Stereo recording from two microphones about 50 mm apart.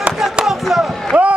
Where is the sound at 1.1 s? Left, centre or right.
Right.